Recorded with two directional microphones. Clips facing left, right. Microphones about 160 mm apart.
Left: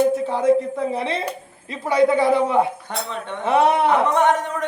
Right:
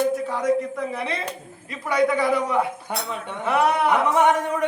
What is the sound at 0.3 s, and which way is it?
A man's voice, 30° left (ahead or behind).